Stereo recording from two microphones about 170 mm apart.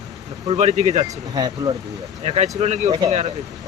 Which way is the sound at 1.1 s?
20° right (ahead or behind).